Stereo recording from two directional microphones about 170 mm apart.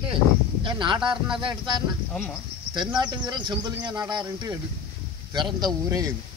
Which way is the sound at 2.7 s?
25° right (ahead or behind).